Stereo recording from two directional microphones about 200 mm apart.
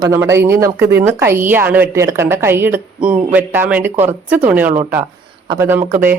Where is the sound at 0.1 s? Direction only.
15° right (ahead or behind).